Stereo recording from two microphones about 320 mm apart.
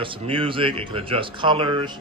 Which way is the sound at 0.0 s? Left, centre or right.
Centre.